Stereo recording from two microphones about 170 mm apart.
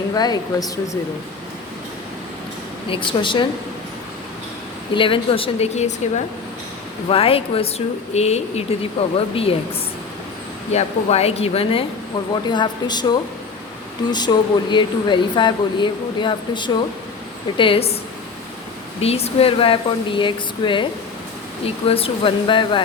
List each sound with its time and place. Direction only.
0.1 s speech: 20° left (ahead or behind)
2.9 s speech: 30° left (ahead or behind)
4.9 s speech: 30° left (ahead or behind)
10.7 s speech: 40° left (ahead or behind)
18.9 s speech: 35° left (ahead or behind)
21.8 s speech: 35° left (ahead or behind)